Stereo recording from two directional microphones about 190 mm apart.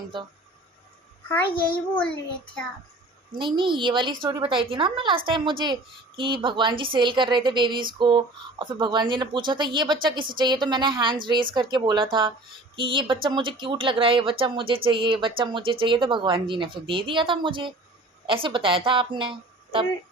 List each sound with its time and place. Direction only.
1.3 s a child's voice: 10° left (ahead or behind)
3.3 s a woman's voice: 25° right (ahead or behind)